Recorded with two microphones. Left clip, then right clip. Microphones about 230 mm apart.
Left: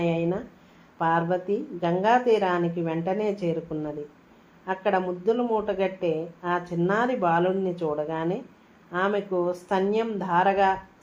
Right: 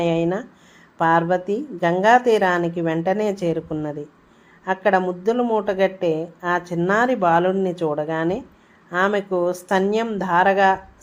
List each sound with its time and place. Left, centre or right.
0.0 s a woman's voice: right